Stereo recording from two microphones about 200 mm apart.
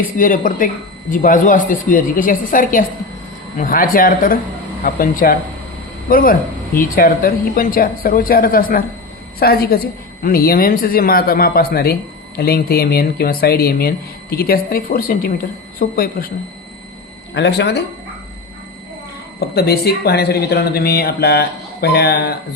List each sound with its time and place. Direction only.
0.2 s a woman's voice: 40° left (ahead or behind)
17.3 s speech: 60° left (ahead or behind)
19.4 s speech: 50° left (ahead or behind)